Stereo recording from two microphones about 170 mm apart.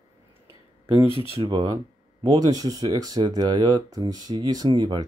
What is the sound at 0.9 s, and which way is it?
Speech, 30° right (ahead or behind).